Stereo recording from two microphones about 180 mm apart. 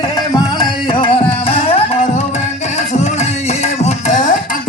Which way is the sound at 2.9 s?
40° left (ahead or behind).